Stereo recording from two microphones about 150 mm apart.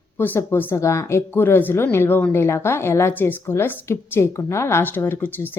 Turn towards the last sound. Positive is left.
turn(degrees=15)  # may be behind; listen again after turning